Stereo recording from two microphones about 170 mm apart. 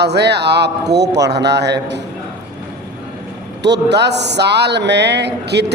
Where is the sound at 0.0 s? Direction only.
75° right (ahead or behind).